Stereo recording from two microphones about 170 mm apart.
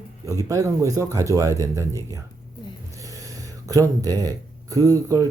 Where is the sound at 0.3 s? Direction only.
20° right (ahead or behind).